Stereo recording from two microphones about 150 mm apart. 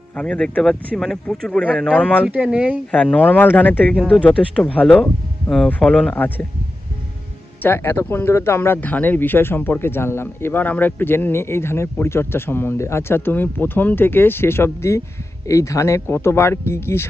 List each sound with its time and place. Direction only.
0.1 s speech: 5° left (ahead or behind)
2.2 s speech: 5° right (ahead or behind)
2.9 s speech: 10° left (ahead or behind)
7.6 s speech: 15° left (ahead or behind)